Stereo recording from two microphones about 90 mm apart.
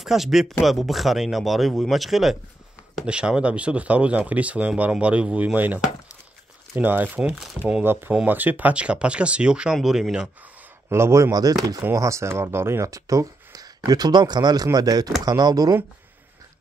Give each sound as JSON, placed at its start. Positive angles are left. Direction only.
{"t": 0.0, "sound": "speech", "side_deg": -5}
{"t": 6.8, "sound": "speech", "side_deg": -20}
{"t": 7.8, "sound": "speech", "side_deg": -25}
{"t": 10.9, "sound": "speech", "side_deg": -30}